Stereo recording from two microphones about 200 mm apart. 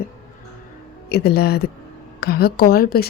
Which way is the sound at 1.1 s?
50° left (ahead or behind).